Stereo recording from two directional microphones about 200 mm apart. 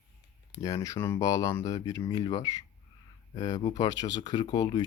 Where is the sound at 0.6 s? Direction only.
15° left (ahead or behind).